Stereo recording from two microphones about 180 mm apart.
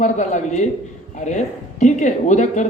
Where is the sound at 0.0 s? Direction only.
45° left (ahead or behind).